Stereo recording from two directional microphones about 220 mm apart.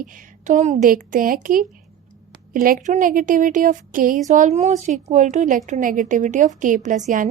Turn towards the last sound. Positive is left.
turn(degrees=-35)  # may be behind; listen again after turning